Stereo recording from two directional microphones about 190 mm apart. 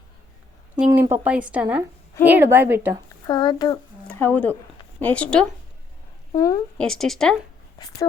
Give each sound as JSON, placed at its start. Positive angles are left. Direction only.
{"t": 0.9, "sound": "a woman's voice", "side_deg": -10}
{"t": 3.2, "sound": "speech", "side_deg": 20}
{"t": 4.0, "sound": "speech", "side_deg": 10}
{"t": 6.3, "sound": "speech", "side_deg": 20}
{"t": 6.7, "sound": "speech", "side_deg": 0}
{"t": 7.8, "sound": "speech", "side_deg": 20}